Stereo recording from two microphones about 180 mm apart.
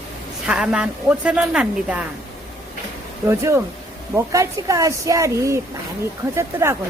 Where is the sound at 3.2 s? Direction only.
15° right (ahead or behind).